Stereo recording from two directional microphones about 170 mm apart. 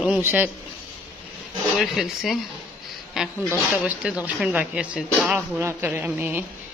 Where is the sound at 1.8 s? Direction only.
Centre (ahead or behind).